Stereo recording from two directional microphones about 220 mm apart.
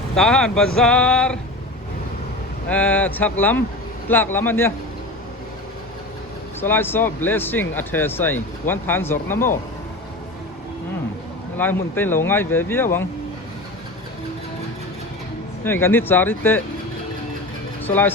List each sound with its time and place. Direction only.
0.2 s a sound: centre (ahead or behind)
2.6 s speech: 5° left (ahead or behind)
6.6 s speech: 10° left (ahead or behind)
11.5 s speech: 10° left (ahead or behind)
15.6 s speech: 10° left (ahead or behind)
17.8 s speech: 10° left (ahead or behind)